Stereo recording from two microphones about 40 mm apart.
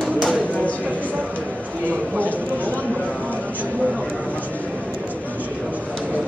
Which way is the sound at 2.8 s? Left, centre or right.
Left.